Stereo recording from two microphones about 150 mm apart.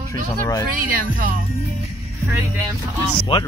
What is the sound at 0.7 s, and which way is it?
Speech, 65° right (ahead or behind).